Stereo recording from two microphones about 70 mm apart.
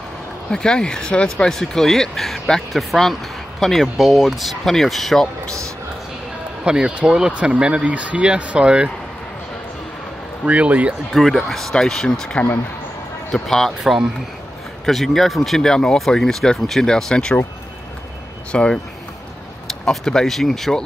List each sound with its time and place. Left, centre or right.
0.5 s speech: centre
6.6 s speech: centre
10.4 s speech: right
11.1 s speech: centre
18.5 s speech: centre